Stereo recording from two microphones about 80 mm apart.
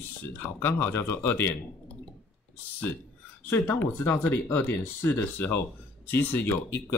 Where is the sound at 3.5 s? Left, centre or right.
Left.